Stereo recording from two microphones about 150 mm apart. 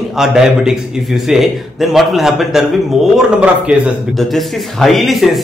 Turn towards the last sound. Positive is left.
turn(degrees=0)  # may be behind; listen again after turning